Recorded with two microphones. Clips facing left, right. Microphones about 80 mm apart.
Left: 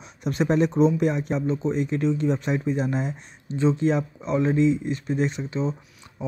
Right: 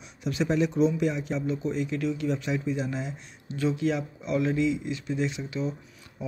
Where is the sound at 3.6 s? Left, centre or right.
Left.